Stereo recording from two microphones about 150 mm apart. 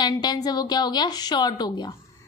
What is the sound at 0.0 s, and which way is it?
Speech, 30° left (ahead or behind).